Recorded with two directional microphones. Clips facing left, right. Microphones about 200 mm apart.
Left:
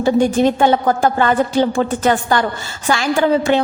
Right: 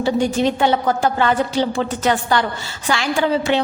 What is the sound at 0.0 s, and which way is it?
A woman's voice, 50° left (ahead or behind).